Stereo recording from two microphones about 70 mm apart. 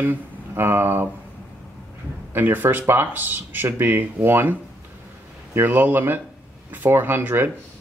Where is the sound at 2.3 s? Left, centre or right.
Right.